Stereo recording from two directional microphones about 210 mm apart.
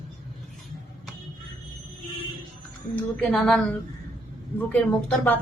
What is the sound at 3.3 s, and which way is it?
A woman's voice, centre (ahead or behind).